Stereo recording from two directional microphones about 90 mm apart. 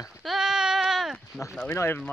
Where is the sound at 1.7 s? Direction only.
30° left (ahead or behind).